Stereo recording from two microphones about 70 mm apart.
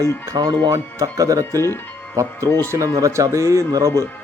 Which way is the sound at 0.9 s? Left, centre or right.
Right.